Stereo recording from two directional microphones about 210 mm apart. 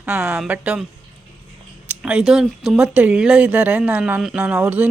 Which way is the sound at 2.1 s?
5° right (ahead or behind).